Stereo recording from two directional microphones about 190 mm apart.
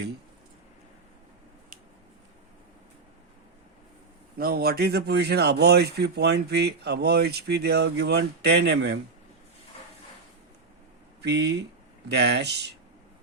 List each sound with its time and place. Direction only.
4.4 s a man's voice: 55° right (ahead or behind)
11.2 s a man's voice: 60° right (ahead or behind)